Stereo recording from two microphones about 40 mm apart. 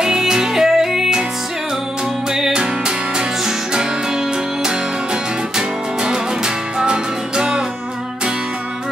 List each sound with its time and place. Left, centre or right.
0.0 s music: centre
2.3 s music: centre
5.6 s music: centre